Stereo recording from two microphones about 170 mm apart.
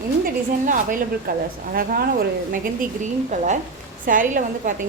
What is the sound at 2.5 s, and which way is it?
A woman's voice, 55° right (ahead or behind).